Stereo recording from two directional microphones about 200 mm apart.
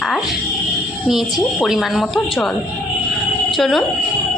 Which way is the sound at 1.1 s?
Centre (ahead or behind).